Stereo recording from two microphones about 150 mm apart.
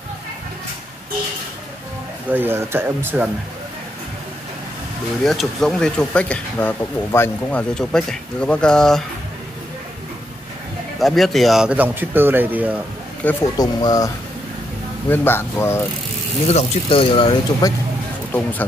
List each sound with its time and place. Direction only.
2.2 s speech: 15° right (ahead or behind)
5.2 s speech: centre (ahead or behind)
11.0 s speech: centre (ahead or behind)
13.2 s speech: 10° left (ahead or behind)
13.6 s speech: 25° left (ahead or behind)
15.0 s speech: 15° left (ahead or behind)
16.4 s speech: 40° left (ahead or behind)